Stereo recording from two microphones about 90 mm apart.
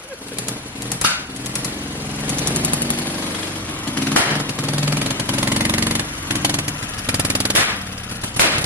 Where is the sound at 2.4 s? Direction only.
20° right (ahead or behind).